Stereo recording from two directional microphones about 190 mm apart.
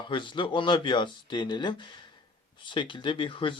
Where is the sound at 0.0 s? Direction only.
25° left (ahead or behind).